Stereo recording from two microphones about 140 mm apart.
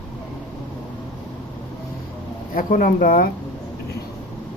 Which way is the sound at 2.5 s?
85° left.